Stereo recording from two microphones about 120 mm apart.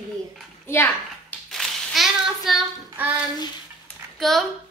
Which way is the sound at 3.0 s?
15° right (ahead or behind).